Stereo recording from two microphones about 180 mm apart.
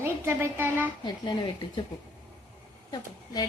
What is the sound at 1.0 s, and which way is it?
Speech, 25° left (ahead or behind).